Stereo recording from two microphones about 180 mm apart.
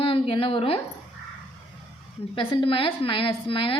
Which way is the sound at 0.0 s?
30° left (ahead or behind).